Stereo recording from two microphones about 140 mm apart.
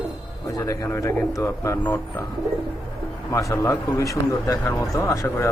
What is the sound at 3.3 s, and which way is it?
Speech, 20° left (ahead or behind).